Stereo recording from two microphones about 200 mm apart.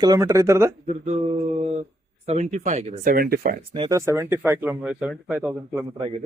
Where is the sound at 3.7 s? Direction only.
25° right (ahead or behind).